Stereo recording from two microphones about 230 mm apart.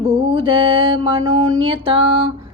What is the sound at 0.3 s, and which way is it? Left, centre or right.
Speech, right.